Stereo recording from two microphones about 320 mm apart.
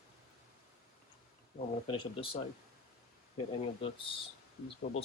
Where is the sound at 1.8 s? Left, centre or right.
Centre.